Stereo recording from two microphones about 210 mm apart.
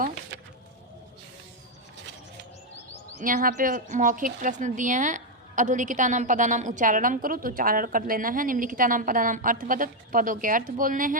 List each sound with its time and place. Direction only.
3.2 s speech: 40° right (ahead or behind)